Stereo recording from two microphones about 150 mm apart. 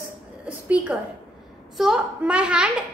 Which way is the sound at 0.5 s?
10° right (ahead or behind).